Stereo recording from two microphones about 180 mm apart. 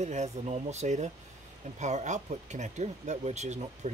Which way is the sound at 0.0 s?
40° right (ahead or behind).